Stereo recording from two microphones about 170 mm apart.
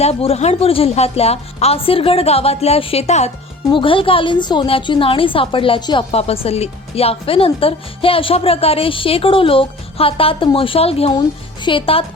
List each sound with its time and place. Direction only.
0.0 s a woman's voice: 35° left (ahead or behind)
3.7 s a woman's voice: 30° left (ahead or behind)